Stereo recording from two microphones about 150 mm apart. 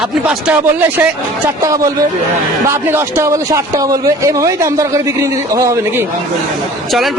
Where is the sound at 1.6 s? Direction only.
20° right (ahead or behind).